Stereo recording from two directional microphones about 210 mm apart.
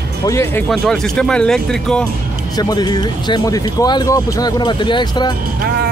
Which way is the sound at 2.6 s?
20° left (ahead or behind).